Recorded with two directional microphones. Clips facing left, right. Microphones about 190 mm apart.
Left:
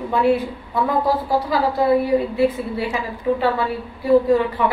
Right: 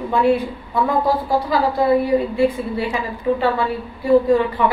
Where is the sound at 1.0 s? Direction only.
5° left (ahead or behind).